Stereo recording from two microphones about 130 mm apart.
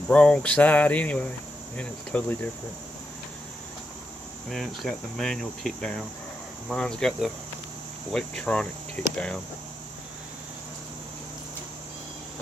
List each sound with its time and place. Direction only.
0.1 s speech: 10° left (ahead or behind)
4.5 s speech: centre (ahead or behind)